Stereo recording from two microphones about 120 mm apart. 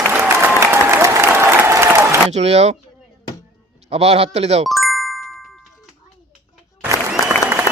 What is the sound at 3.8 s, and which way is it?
Speech, 55° right (ahead or behind).